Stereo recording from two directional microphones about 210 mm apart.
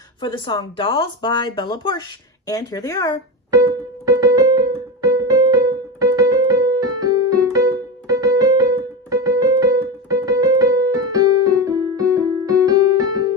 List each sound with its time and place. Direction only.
0.2 s speech: 20° left (ahead or behind)
3.5 s keyboard: 15° right (ahead or behind)